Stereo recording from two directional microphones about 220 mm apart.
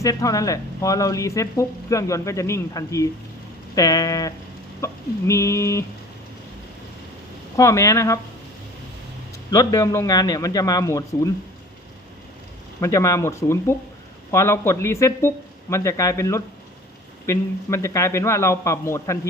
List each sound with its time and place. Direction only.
0.0 s speech: 15° left (ahead or behind)
7.5 s speech: 15° left (ahead or behind)
9.5 s speech: 15° left (ahead or behind)
12.8 s speech: 15° left (ahead or behind)